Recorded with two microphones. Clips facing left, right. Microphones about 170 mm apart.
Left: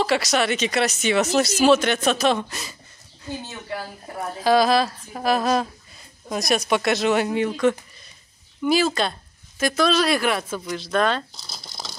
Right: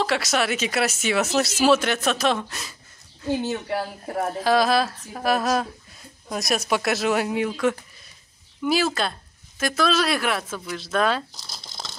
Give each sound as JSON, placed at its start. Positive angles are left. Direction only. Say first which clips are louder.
{"t": 0.0, "sound": "speech", "louder": "left 2 dB", "side_deg": 0}
{"t": 3.3, "sound": "speech", "louder": "right 9 dB", "side_deg": -85}
{"t": 4.4, "sound": "speech", "louder": "left 3 dB", "side_deg": 0}
{"t": 11.6, "sound": "a sound", "louder": "left 1 dB", "side_deg": 10}